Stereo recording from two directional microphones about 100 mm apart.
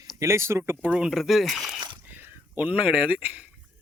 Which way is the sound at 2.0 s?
20° right (ahead or behind).